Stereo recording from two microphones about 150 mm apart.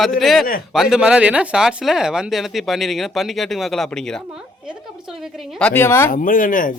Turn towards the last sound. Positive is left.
turn(degrees=65)  # may be behind; listen again after turning